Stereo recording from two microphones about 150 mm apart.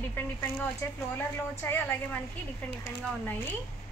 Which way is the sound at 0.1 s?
15° left (ahead or behind).